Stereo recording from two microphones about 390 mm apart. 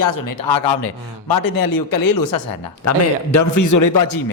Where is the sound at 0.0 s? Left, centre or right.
Left.